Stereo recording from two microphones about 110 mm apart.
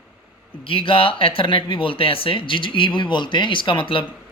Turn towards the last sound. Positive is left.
turn(degrees=50)  # may be behind; listen again after turning